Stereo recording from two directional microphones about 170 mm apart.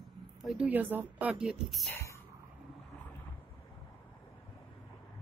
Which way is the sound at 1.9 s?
15° left (ahead or behind).